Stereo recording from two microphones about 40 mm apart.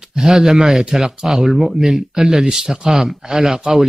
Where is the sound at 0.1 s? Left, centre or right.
Centre.